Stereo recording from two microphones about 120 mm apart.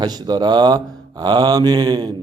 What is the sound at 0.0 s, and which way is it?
Speech, 35° right (ahead or behind).